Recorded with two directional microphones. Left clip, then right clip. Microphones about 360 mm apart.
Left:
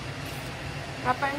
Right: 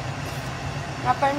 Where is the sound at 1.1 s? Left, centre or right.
Centre.